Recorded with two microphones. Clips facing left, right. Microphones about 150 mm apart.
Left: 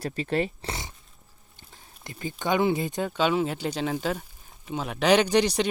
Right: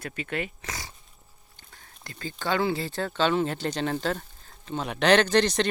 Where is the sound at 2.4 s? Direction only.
20° left (ahead or behind).